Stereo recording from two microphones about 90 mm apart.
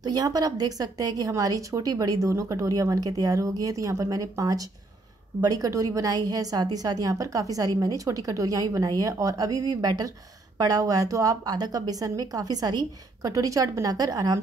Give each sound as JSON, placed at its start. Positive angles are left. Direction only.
{"t": 0.0, "sound": "a woman's voice", "side_deg": -45}